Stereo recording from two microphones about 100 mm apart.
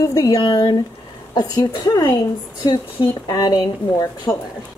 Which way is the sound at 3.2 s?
40° left (ahead or behind).